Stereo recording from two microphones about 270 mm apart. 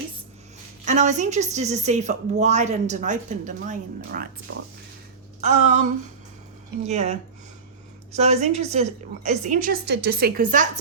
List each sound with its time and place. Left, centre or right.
0.9 s a woman's voice: right
4.5 s speech: right
5.4 s a woman's voice: right